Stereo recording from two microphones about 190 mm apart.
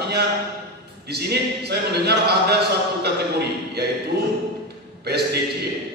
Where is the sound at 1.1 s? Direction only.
60° right (ahead or behind).